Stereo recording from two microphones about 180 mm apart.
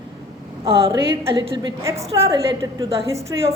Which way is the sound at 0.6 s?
30° right (ahead or behind).